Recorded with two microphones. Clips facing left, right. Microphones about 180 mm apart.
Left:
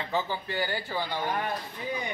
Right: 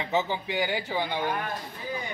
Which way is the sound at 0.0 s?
20° right (ahead or behind).